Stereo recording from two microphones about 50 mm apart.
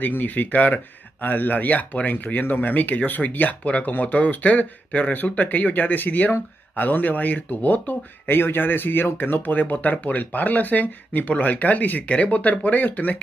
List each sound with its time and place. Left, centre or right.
0.0 s speech: left